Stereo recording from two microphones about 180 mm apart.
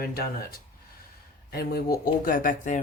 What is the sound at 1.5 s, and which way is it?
Speech, 60° left (ahead or behind).